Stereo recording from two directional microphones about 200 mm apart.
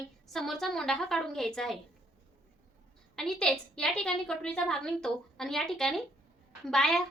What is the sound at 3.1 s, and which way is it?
A woman's voice, 5° left (ahead or behind).